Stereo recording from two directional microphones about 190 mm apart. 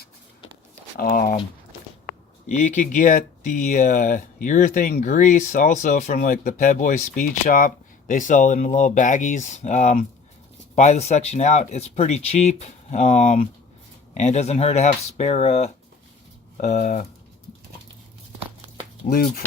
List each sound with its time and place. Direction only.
0.9 s speech: 50° left (ahead or behind)
2.5 s speech: 40° left (ahead or behind)
19.0 s speech: 55° left (ahead or behind)